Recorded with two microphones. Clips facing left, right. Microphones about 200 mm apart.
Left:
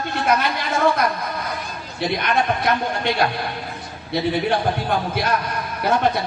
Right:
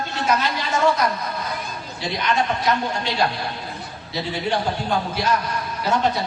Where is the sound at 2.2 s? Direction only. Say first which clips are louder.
Right 1 dB; 55° left (ahead or behind).